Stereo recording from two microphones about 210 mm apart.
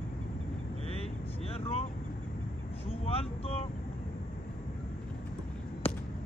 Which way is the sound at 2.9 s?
30° left (ahead or behind).